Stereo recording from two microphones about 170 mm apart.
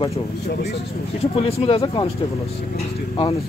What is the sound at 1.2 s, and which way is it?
Speech, 35° left (ahead or behind).